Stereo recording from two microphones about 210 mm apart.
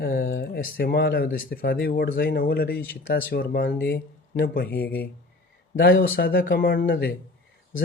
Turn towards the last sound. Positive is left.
turn(degrees=50)  # may be behind; listen again after turning